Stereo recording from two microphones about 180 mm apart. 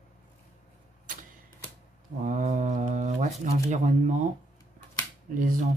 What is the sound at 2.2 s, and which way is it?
Speech, 45° right (ahead or behind).